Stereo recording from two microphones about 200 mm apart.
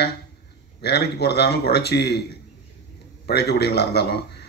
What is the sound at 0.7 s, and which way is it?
Speech, 55° left (ahead or behind).